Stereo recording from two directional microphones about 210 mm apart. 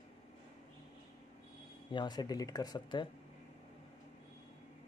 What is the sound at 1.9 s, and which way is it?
Speech, 20° left (ahead or behind).